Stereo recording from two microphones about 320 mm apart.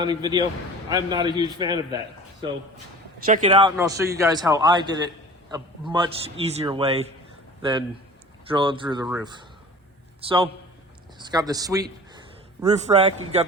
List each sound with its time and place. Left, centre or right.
0.0 s a man's voice: centre
3.2 s speech: right
3.5 s a man's voice: centre